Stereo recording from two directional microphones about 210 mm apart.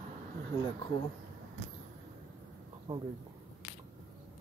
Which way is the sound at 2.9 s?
20° right (ahead or behind).